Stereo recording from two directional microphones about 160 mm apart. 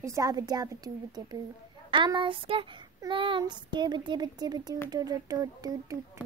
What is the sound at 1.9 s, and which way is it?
Child singing, 30° right (ahead or behind).